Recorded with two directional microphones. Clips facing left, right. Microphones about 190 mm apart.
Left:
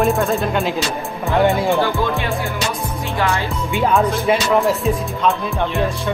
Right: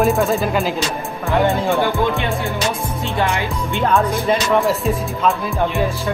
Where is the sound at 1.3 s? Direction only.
15° left (ahead or behind).